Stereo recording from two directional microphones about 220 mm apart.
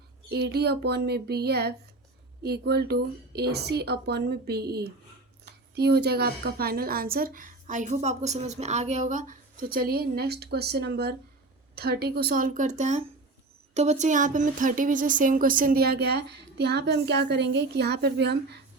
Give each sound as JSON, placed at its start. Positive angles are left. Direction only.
{"t": 0.3, "sound": "a woman's voice", "side_deg": -50}